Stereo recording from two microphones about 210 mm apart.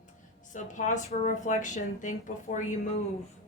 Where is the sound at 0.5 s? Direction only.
35° left (ahead or behind).